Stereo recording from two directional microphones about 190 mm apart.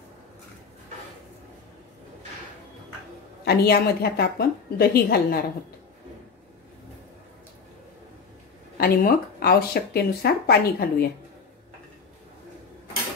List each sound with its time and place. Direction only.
3.4 s a woman's voice: 55° left (ahead or behind)
8.7 s speech: 50° left (ahead or behind)